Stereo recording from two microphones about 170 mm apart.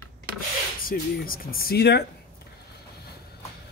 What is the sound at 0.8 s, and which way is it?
Speech, 60° left (ahead or behind).